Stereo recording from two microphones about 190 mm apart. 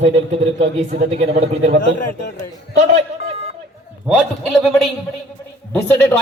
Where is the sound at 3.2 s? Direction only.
65° left (ahead or behind).